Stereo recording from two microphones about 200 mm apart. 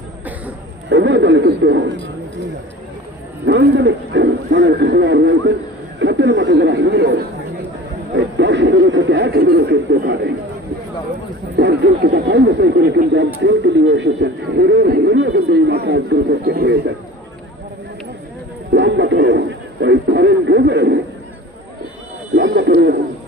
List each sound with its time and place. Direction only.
0.9 s a sound: 60° right (ahead or behind)
3.4 s speech: 60° right (ahead or behind)
11.5 s speech: 55° right (ahead or behind)
18.7 s speech: 65° right (ahead or behind)
22.4 s speech: 65° right (ahead or behind)